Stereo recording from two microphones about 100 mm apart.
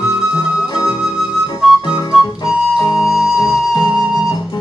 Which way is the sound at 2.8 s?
35° left (ahead or behind).